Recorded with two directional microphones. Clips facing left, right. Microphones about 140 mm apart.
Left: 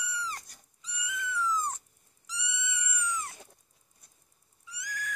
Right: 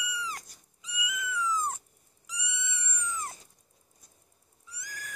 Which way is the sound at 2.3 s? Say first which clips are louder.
Left 1 dB; 15° right (ahead or behind).